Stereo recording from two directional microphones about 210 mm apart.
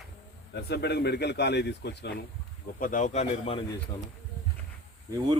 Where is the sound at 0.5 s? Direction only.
50° left (ahead or behind).